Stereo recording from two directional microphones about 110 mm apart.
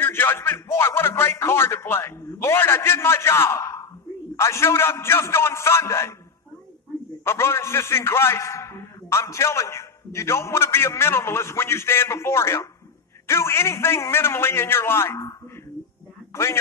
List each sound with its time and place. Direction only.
0.0 s a man's voice: 20° left (ahead or behind)
7.2 s a man's voice: 25° left (ahead or behind)
16.3 s a sound: 25° left (ahead or behind)